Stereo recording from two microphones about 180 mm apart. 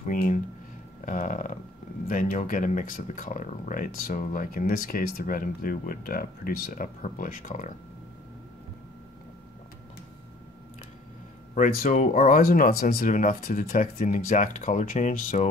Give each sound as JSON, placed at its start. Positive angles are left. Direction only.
{"t": 0.0, "sound": "speech", "side_deg": 45}
{"t": 1.0, "sound": "a sound", "side_deg": 45}
{"t": 2.0, "sound": "speech", "side_deg": 50}
{"t": 11.5, "sound": "speech", "side_deg": 50}